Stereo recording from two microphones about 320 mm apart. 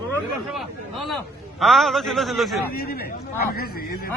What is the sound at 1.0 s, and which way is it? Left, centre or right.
A man's voice, centre.